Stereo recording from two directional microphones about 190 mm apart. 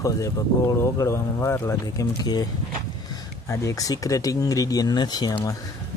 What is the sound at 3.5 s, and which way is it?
Speech, 15° left (ahead or behind).